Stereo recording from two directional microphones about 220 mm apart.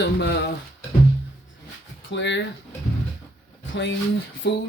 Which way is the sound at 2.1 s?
55° left (ahead or behind).